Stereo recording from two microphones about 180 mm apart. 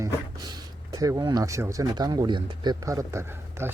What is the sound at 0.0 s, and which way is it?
Speech, 20° right (ahead or behind).